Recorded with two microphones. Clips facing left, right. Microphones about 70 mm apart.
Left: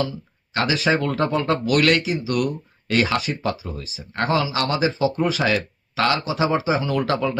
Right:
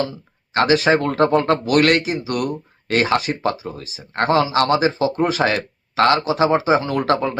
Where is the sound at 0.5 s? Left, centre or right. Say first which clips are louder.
Right 5 dB; right.